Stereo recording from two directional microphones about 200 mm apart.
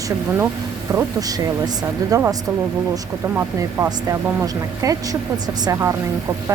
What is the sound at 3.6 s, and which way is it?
A woman's voice, 15° right (ahead or behind).